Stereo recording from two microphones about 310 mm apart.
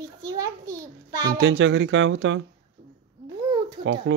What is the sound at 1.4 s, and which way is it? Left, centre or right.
Speech, right.